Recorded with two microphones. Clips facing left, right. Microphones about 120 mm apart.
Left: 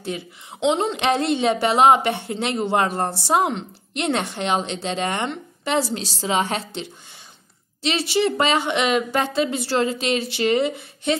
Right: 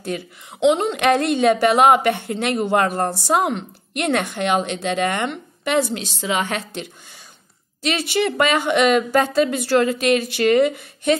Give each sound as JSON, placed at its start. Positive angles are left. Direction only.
{"t": 0.7, "sound": "a woman's voice", "side_deg": 30}
{"t": 7.8, "sound": "a woman's voice", "side_deg": 30}